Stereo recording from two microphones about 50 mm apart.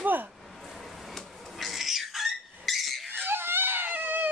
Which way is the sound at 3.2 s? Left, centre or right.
Right.